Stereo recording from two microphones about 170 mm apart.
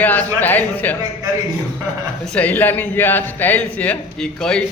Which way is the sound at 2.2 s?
5° left (ahead or behind).